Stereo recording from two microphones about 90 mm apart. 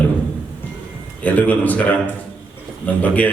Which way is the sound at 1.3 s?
20° left (ahead or behind).